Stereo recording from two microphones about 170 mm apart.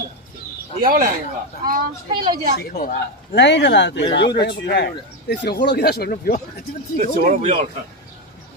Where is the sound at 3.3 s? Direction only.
90° left; by 6.4 s 60° left (ahead or behind).